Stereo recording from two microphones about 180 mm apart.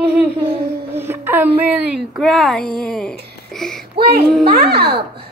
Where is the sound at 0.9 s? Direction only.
10° right (ahead or behind).